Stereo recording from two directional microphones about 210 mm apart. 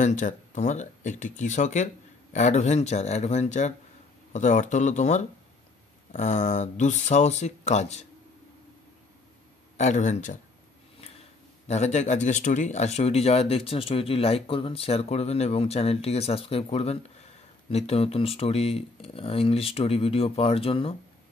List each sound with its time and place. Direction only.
0.0 s speech: 35° left (ahead or behind)
9.8 s speech: 35° left (ahead or behind)
11.6 s speech: 30° left (ahead or behind)